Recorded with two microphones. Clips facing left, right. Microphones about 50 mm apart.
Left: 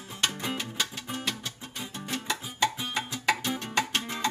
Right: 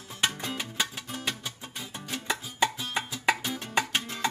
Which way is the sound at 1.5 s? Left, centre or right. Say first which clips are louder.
Left 1 dB; centre.